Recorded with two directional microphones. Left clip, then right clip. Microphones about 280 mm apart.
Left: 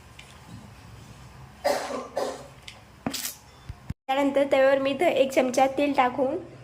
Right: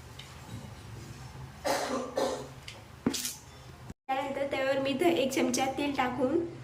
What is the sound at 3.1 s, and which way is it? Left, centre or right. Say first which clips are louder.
Music: even; centre.